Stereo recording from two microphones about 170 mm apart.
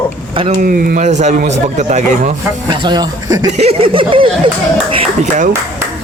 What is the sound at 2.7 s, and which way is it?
Speech, 25° right (ahead or behind).